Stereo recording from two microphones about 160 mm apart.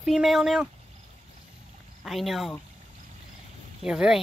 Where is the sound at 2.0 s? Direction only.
Centre (ahead or behind).